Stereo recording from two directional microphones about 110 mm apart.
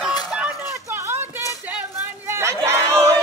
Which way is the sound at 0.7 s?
25° right (ahead or behind).